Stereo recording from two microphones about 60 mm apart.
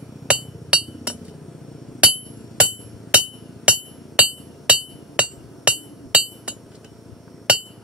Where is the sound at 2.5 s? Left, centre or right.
Right.